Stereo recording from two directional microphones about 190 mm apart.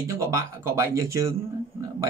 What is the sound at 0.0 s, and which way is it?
Speech, 15° right (ahead or behind).